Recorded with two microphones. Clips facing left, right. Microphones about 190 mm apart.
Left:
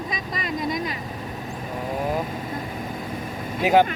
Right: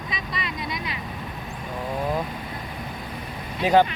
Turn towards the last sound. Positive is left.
turn(degrees=10)  # may be behind; listen again after turning